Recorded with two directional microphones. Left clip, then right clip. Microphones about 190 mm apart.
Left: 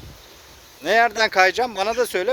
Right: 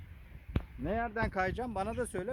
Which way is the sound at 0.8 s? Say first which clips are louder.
Left 18 dB; 25° left (ahead or behind).